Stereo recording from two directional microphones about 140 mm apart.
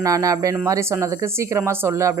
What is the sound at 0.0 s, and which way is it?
Speech, 25° right (ahead or behind).